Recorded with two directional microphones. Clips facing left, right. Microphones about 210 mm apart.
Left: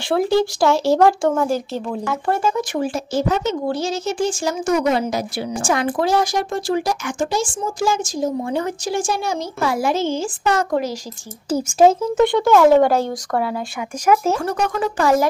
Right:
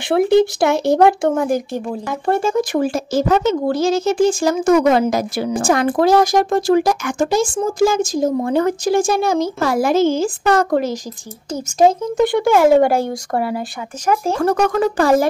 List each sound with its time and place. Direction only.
0.1 s speech: 20° right (ahead or behind)
2.4 s speech: 45° right (ahead or behind)
3.7 s speech: 90° right
4.7 s speech: 50° right (ahead or behind)
10.0 s speech: 90° right
10.4 s speech: 55° right (ahead or behind)
11.5 s speech: 10° left (ahead or behind)
12.4 s speech: 10° right (ahead or behind)
14.4 s speech: 50° right (ahead or behind)
15.0 s speech: 30° right (ahead or behind)